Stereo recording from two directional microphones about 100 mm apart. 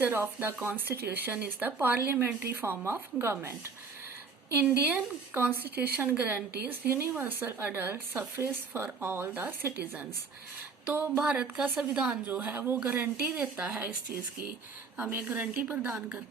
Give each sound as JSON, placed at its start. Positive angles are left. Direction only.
{"t": 0.0, "sound": "speech", "side_deg": -20}
{"t": 4.9, "sound": "a woman's voice", "side_deg": -20}
{"t": 14.9, "sound": "a woman's voice", "side_deg": -15}